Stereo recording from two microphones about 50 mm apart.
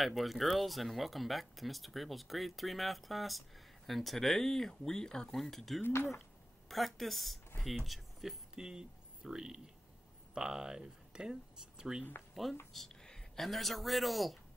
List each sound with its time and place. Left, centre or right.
0.0 s speech: centre
5.8 s cutlery: left
6.7 s speech: centre
8.5 s speech: centre
12.7 s speech: centre